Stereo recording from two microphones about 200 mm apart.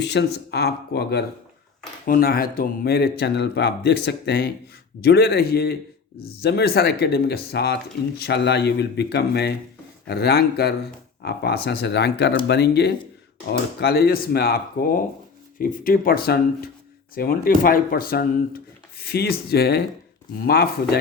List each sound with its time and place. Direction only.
0.0 s speech: 60° left (ahead or behind)